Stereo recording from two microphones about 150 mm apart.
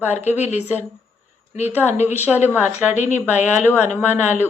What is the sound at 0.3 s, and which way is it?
Speech, 50° left (ahead or behind).